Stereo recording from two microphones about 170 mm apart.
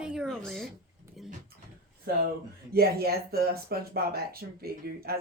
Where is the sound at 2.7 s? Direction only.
65° right (ahead or behind).